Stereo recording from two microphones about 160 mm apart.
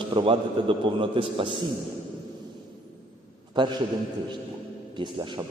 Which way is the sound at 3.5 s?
30° right (ahead or behind).